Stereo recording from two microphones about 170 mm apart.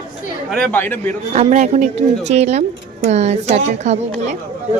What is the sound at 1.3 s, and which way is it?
Speech, 40° right (ahead or behind).